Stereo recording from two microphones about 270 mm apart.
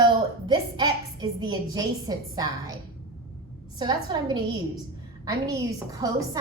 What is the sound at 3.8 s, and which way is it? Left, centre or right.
A woman's voice, centre.